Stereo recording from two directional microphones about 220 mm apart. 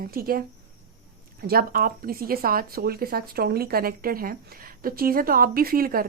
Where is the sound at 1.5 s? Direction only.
40° right (ahead or behind).